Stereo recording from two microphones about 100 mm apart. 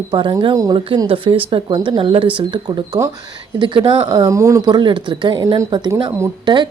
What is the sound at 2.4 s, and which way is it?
Speech, 50° right (ahead or behind).